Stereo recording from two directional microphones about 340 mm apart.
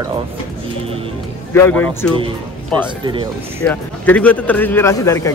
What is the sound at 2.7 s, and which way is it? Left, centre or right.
Speech, centre.